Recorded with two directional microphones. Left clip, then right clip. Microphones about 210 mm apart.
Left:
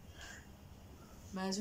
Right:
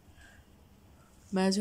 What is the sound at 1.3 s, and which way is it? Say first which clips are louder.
Speech: right 11 dB; 45° right (ahead or behind).